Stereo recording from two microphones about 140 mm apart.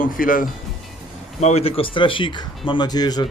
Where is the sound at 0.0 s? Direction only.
80° left.